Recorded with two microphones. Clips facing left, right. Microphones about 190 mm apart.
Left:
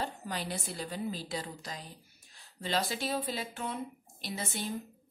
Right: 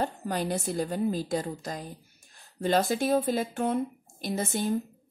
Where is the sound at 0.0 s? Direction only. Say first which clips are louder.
Right 7 dB; 50° right (ahead or behind).